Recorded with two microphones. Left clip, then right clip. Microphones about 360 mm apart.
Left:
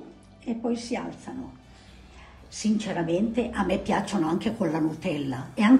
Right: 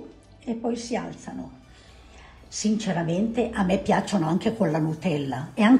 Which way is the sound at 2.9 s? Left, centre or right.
Right.